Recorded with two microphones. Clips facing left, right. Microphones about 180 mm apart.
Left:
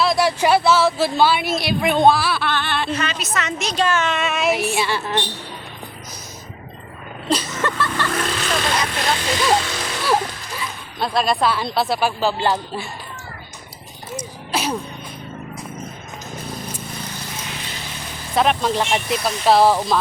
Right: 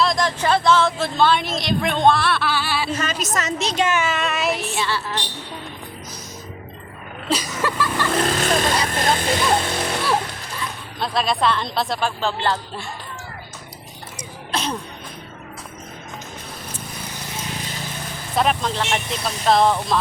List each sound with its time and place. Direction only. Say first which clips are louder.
0.0 s speech: left 3 dB; 5° left (ahead or behind)
2.9 s speech: even; 45° right (ahead or behind)
3.6 s a child's voice: left 1 dB; 20° right (ahead or behind)
4.0 s speech: left 2 dB; centre (ahead or behind)
4.5 s speech: left 4 dB; 15° left (ahead or behind)
7.3 s speech: left 1 dB; 10° right (ahead or behind)
8.3 s speech: right 3 dB; 40° right (ahead or behind)
9.0 s speech: right 1 dB; 50° right (ahead or behind)
10.6 s speech: left 2 dB; centre (ahead or behind)
14.5 s a sound: left 2 dB; 10° left (ahead or behind)
18.3 s speech: left 3 dB; centre (ahead or behind)